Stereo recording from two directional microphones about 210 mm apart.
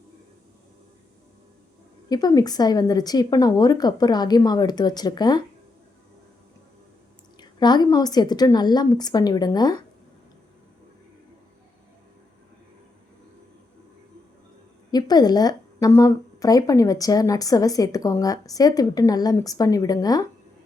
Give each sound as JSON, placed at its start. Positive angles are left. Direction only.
{"t": 2.0, "sound": "speech", "side_deg": 20}
{"t": 7.3, "sound": "speech", "side_deg": 20}
{"t": 14.8, "sound": "a woman's voice", "side_deg": 20}